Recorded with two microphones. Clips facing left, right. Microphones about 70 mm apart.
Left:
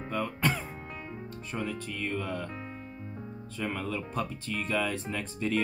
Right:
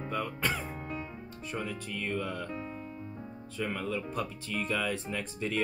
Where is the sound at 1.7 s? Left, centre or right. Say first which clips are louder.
Left 1 dB; centre.